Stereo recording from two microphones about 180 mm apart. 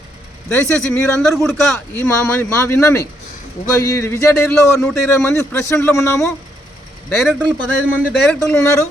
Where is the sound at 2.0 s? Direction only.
15° left (ahead or behind).